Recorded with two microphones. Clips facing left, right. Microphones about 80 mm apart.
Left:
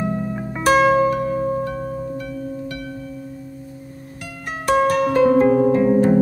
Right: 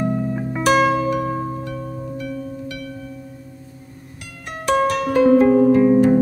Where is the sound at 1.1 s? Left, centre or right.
Left.